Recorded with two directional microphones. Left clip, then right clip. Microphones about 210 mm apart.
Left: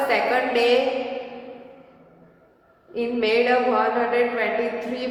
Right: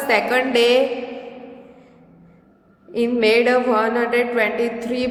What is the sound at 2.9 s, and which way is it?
A woman's voice, 50° right (ahead or behind).